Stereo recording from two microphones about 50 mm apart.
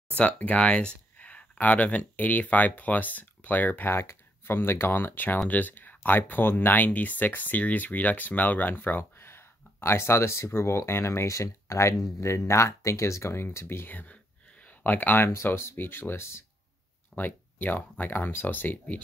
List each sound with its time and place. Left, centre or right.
0.1 s speech: left
3.9 s speech: left
4.5 s speech: left
13.8 s speech: left
15.4 s speech: left
17.2 s speech: left